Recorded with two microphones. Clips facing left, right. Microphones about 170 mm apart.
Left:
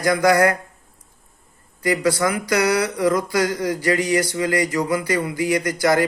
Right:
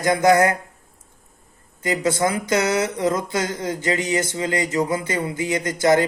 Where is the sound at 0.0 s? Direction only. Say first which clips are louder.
Even; 25° right (ahead or behind).